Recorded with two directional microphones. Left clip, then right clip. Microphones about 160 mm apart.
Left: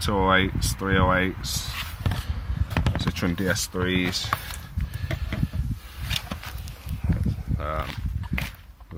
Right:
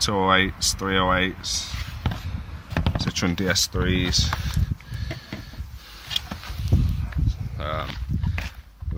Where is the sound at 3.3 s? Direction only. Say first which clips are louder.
Even; 15° right (ahead or behind).